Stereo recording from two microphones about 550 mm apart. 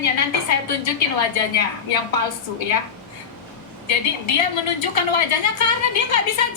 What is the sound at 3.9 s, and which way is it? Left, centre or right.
A woman's voice, left.